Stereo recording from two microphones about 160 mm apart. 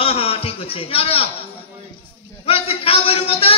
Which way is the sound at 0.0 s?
35° left (ahead or behind).